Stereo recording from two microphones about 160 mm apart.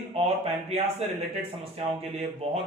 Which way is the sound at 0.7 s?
40° right (ahead or behind).